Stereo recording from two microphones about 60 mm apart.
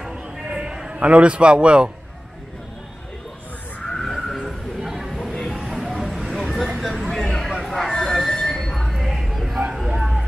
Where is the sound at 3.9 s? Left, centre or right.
Centre.